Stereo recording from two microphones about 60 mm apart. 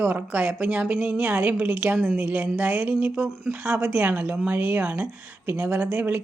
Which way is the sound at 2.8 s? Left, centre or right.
Right.